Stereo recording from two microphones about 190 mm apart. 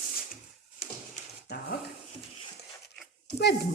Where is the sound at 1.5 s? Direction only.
60° left (ahead or behind).